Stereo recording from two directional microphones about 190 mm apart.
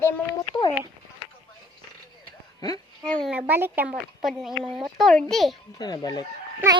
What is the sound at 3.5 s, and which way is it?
A child's voice, 10° right (ahead or behind).